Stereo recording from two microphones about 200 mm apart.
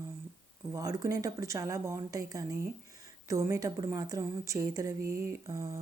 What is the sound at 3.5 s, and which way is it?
A woman's voice, 15° right (ahead or behind).